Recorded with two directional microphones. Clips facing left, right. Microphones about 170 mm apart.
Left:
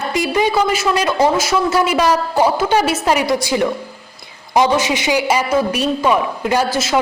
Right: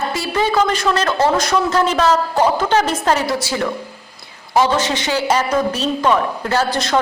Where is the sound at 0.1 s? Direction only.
15° left (ahead or behind).